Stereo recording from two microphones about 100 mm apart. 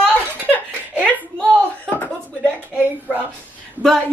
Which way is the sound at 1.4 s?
15° left (ahead or behind).